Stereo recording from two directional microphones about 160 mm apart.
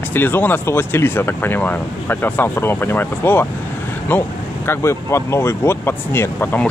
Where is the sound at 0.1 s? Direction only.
10° left (ahead or behind).